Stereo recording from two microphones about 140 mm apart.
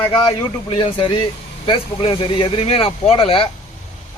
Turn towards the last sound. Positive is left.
turn(degrees=40)  # may be behind; listen again after turning